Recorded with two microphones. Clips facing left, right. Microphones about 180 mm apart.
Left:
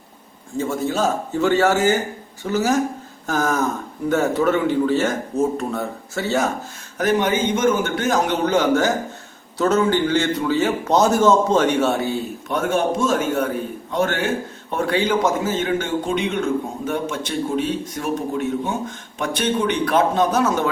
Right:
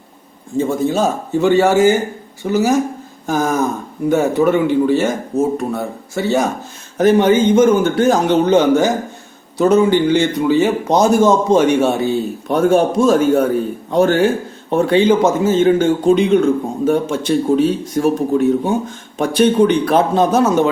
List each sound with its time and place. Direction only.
0.5 s a man's voice: 20° right (ahead or behind)
7.0 s a man's voice: 30° right (ahead or behind)
12.5 s a man's voice: 35° right (ahead or behind)